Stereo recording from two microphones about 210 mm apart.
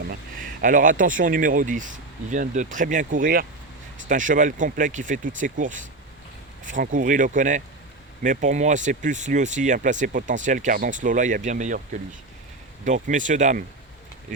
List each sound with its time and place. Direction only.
0.1 s speech: 40° right (ahead or behind)
12.8 s speech: 35° right (ahead or behind)